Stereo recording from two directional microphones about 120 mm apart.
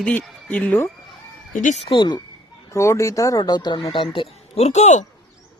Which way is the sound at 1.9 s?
40° left (ahead or behind).